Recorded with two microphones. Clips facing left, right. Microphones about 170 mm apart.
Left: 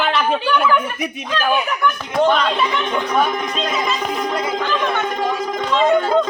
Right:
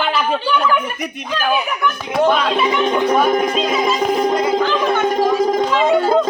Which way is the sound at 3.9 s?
35° right (ahead or behind).